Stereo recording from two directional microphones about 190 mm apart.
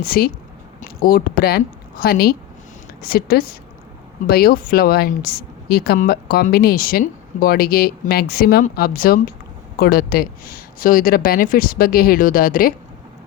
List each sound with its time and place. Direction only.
0.0 s a woman's voice: 50° left (ahead or behind)